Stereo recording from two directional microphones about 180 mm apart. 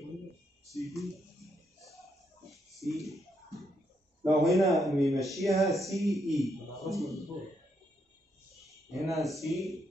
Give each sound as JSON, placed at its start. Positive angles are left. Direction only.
{"t": 0.7, "sound": "a sound", "side_deg": 0}
{"t": 2.5, "sound": "music", "side_deg": 0}
{"t": 4.4, "sound": "a man's voice", "side_deg": 0}
{"t": 9.1, "sound": "a man's voice", "side_deg": 0}